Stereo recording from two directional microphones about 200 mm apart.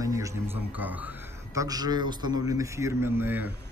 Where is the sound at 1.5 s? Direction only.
20° right (ahead or behind).